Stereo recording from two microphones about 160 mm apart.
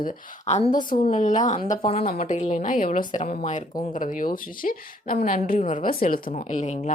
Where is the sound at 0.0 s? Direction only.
50° left (ahead or behind).